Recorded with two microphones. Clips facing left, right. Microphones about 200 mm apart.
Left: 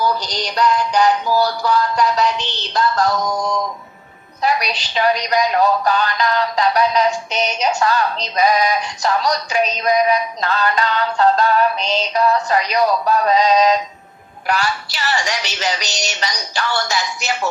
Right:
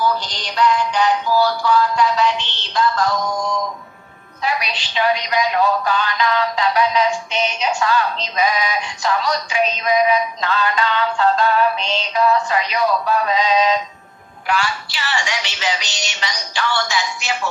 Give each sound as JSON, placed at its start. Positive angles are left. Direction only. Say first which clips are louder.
{"t": 0.0, "sound": "a woman's voice", "louder": "left 1 dB", "side_deg": 40}
{"t": 4.4, "sound": "a woman's voice", "louder": "left 4 dB", "side_deg": 40}